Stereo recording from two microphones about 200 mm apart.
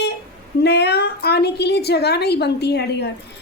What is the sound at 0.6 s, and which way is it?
A woman's voice, 55° left (ahead or behind).